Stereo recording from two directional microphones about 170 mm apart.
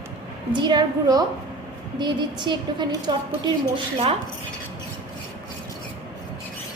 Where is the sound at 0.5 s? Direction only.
25° right (ahead or behind).